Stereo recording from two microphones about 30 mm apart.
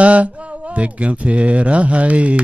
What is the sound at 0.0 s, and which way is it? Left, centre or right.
A man's voice, right.